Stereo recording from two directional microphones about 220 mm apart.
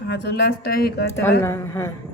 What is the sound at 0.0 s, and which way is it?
Speech, 45° left (ahead or behind).